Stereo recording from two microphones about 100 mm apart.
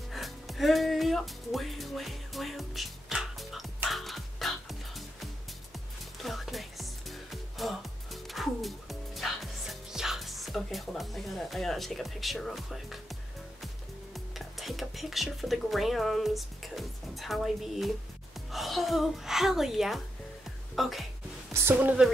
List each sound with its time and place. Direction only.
0.1 s music: centre (ahead or behind)
14.1 s a woman's voice: centre (ahead or behind)
21.5 s a woman's voice: 20° right (ahead or behind)